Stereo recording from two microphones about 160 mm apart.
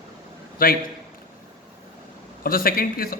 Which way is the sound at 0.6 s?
65° left (ahead or behind).